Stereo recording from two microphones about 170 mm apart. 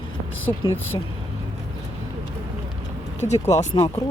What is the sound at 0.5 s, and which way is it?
Speech, 25° left (ahead or behind).